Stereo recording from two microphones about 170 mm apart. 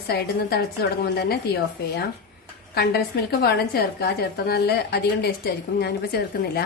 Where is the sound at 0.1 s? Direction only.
70° left (ahead or behind).